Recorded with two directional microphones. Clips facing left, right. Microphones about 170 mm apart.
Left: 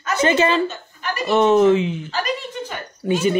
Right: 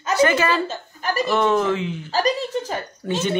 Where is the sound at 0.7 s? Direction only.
40° right (ahead or behind).